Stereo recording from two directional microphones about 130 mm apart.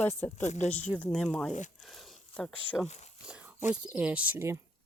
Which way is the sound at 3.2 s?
5° right (ahead or behind).